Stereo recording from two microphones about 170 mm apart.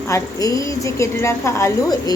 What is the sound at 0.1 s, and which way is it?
A woman's voice, 20° left (ahead or behind).